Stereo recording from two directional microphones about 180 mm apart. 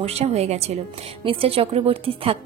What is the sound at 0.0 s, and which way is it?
A woman's voice, 35° right (ahead or behind).